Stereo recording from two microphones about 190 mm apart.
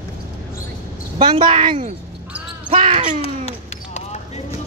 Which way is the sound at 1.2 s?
30° right (ahead or behind).